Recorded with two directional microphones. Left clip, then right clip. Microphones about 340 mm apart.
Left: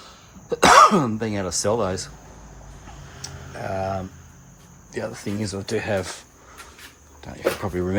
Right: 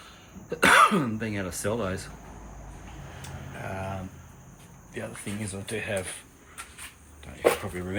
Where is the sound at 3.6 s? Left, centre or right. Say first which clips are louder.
Left 9 dB; centre.